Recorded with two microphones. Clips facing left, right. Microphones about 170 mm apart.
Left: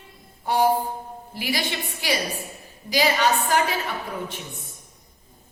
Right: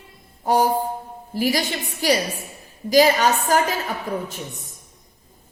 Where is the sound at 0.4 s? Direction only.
40° right (ahead or behind).